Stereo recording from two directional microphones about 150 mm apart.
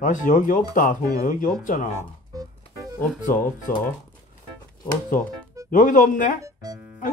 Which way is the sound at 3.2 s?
60° left (ahead or behind).